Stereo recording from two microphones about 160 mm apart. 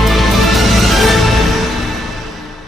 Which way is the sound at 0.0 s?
Centre (ahead or behind).